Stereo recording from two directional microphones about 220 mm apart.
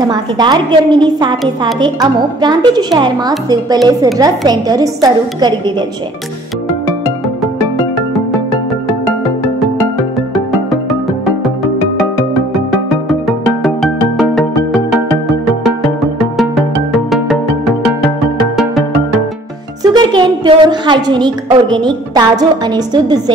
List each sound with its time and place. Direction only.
0.0 s a woman's voice: 20° right (ahead or behind)
13.7 s music: centre (ahead or behind)
19.8 s speech: 20° right (ahead or behind)